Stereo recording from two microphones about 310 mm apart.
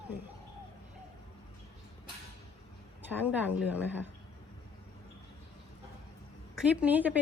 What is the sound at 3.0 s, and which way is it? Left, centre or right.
A woman's voice, centre.